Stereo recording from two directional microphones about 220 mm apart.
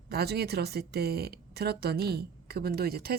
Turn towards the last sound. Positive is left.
turn(degrees=-45)  # may be behind; listen again after turning